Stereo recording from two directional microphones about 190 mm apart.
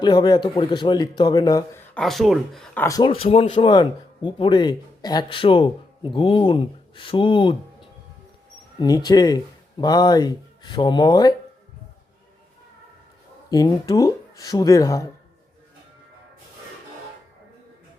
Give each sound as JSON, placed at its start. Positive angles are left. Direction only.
{"t": 0.0, "sound": "speech", "side_deg": 20}
{"t": 2.0, "sound": "speech", "side_deg": 0}
{"t": 2.8, "sound": "speech", "side_deg": 20}
{"t": 13.5, "sound": "speech", "side_deg": 20}